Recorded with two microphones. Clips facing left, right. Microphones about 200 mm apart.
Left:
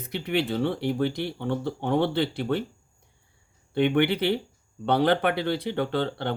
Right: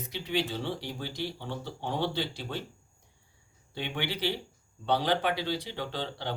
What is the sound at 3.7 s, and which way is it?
Speech, 60° left (ahead or behind).